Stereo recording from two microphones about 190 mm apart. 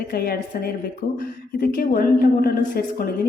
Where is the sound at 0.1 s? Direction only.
55° left (ahead or behind).